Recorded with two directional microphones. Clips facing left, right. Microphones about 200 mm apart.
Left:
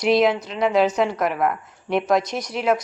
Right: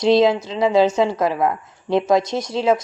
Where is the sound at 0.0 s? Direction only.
25° right (ahead or behind).